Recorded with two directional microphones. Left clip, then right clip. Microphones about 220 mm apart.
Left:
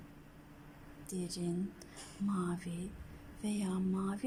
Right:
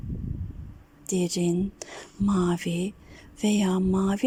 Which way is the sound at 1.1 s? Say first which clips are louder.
Right 15 dB; 35° right (ahead or behind).